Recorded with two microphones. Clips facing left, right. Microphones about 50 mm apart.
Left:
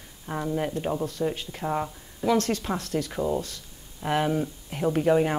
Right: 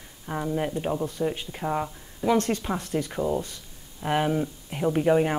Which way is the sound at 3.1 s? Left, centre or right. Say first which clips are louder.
Even; centre.